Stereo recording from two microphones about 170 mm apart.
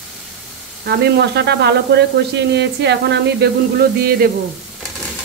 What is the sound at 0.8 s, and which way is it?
Speech, 80° right.